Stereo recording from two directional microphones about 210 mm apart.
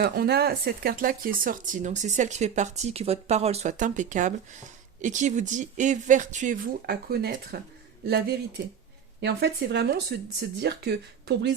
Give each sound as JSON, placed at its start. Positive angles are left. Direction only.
{"t": 0.0, "sound": "speech", "side_deg": -50}